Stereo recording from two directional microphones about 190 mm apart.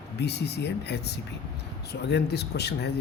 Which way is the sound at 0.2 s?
60° left (ahead or behind).